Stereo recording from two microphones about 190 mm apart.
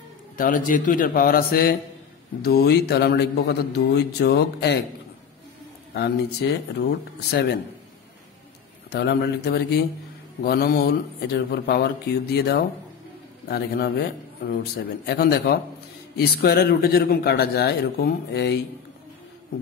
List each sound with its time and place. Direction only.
0.4 s a man's voice: 45° left (ahead or behind)
5.9 s a man's voice: 65° left (ahead or behind)
8.9 s a man's voice: 60° left (ahead or behind)